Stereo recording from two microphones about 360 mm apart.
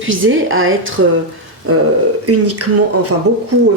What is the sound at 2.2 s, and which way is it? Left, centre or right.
Speech, right.